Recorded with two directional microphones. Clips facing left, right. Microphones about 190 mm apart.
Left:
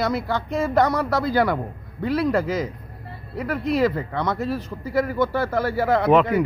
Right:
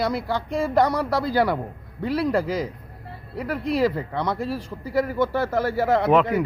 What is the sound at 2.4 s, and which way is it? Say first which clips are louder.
Speech: left 1 dB; 35° right (ahead or behind).